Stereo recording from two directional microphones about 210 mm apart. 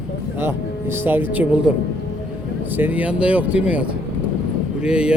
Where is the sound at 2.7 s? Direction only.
10° right (ahead or behind).